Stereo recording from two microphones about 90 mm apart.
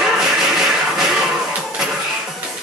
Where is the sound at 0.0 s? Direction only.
5° right (ahead or behind).